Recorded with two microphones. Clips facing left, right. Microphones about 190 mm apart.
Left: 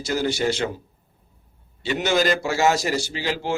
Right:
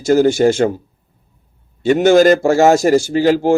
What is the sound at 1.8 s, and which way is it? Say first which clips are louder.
A man's voice: right 12 dB; 50° right (ahead or behind).